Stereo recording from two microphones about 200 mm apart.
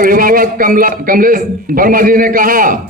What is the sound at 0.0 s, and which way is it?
A man's voice, 45° right (ahead or behind).